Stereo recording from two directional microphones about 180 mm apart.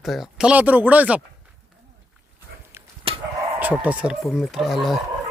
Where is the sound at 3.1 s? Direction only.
30° right (ahead or behind).